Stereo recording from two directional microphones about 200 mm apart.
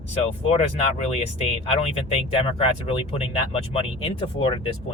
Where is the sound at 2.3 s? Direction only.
30° left (ahead or behind).